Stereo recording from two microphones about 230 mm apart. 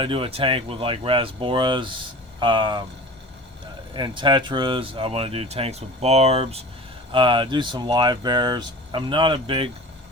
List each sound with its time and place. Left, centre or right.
0.0 s speech: right
3.9 s speech: centre